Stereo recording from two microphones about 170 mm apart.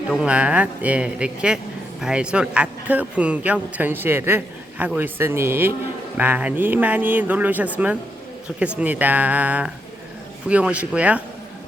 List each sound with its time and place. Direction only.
0.1 s speech: 5° right (ahead or behind)